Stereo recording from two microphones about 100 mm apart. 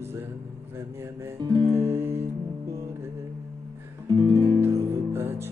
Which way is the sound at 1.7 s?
25° right (ahead or behind).